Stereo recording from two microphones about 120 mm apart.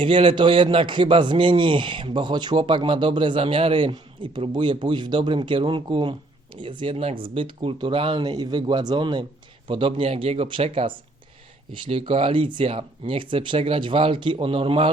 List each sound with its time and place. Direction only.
0.0 s a man's voice: 45° right (ahead or behind)